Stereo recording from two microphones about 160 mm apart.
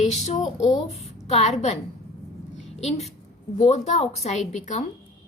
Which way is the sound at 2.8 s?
45° left (ahead or behind).